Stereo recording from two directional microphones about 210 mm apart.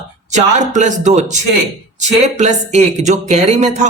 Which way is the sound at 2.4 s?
35° right (ahead or behind).